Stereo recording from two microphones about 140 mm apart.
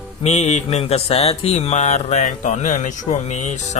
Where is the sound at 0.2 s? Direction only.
50° left (ahead or behind).